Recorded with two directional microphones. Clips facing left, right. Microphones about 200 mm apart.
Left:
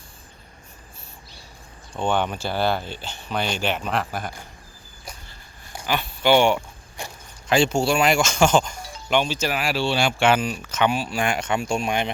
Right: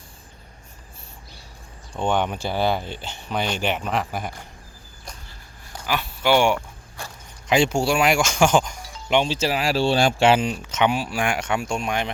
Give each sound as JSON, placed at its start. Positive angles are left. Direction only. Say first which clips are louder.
{"t": 1.9, "sound": "speech", "louder": "even", "side_deg": -15}
{"t": 3.8, "sound": "speech", "louder": "even", "side_deg": -5}
{"t": 5.8, "sound": "speech", "louder": "left 1 dB", "side_deg": -5}
{"t": 6.5, "sound": "zipper", "louder": "left 1 dB", "side_deg": 15}
{"t": 7.5, "sound": "speech", "louder": "even", "side_deg": -15}
{"t": 10.2, "sound": "speech", "louder": "right 2 dB", "side_deg": -25}
{"t": 11.7, "sound": "speech", "louder": "left 2 dB", "side_deg": 0}